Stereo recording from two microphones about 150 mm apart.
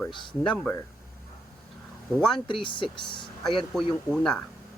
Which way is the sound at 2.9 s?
30° left (ahead or behind).